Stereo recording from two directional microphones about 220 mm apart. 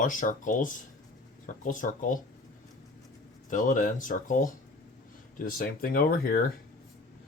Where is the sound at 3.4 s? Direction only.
35° left (ahead or behind).